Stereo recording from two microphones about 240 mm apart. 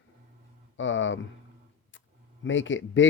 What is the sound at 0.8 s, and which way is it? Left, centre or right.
Speech, left.